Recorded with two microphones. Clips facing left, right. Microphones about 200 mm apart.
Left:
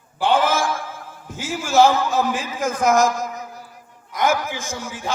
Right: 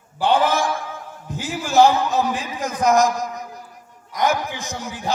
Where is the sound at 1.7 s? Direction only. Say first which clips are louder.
Even; 15° right (ahead or behind).